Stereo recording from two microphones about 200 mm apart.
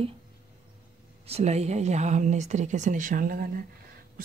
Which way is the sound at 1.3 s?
35° right (ahead or behind).